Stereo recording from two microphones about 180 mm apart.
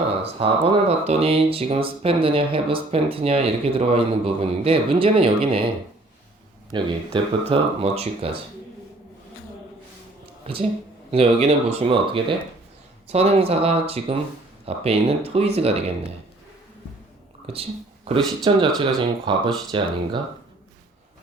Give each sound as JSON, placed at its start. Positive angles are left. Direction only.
{"t": 0.2, "sound": "speech", "side_deg": -30}
{"t": 6.7, "sound": "speech", "side_deg": -25}
{"t": 10.4, "sound": "a woman's voice", "side_deg": -30}
{"t": 17.4, "sound": "a sound", "side_deg": -35}
{"t": 18.5, "sound": "speech", "side_deg": -30}